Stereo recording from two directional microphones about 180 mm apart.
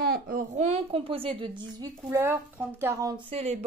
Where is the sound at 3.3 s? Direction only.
35° right (ahead or behind).